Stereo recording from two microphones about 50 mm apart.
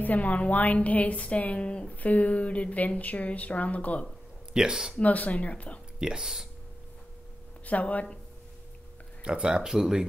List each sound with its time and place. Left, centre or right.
0.0 s speech: left
4.6 s speech: centre
4.9 s speech: left
5.9 s speech: centre
7.6 s speech: left
9.2 s speech: centre